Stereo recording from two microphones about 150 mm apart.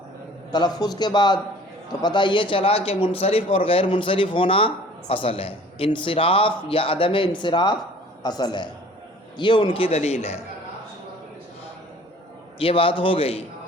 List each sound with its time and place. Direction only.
0.5 s a man's voice: 30° left (ahead or behind); by 10.2 s 45° left (ahead or behind)
12.5 s a man's voice: 35° left (ahead or behind)